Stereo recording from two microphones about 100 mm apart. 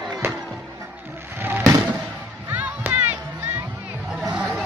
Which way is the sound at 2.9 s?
20° right (ahead or behind).